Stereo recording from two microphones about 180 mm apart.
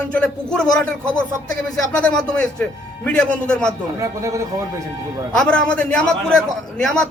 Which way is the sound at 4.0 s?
15° right (ahead or behind).